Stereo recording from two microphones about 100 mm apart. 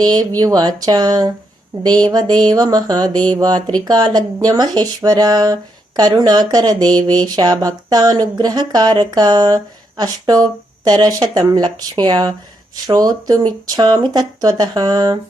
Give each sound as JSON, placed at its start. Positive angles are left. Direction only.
{"t": 0.0, "sound": "speech", "side_deg": -45}